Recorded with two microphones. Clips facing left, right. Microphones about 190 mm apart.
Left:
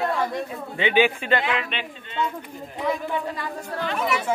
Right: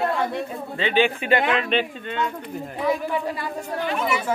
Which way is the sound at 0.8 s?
15° left (ahead or behind).